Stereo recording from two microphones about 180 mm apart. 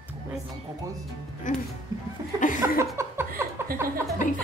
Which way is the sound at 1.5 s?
45° left (ahead or behind).